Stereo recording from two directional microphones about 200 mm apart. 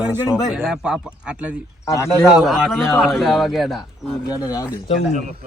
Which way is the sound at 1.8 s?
15° left (ahead or behind).